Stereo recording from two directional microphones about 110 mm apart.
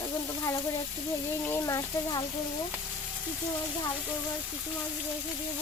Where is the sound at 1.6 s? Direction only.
30° left (ahead or behind).